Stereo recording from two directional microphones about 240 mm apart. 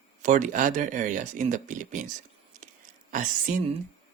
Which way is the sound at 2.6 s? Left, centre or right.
Right.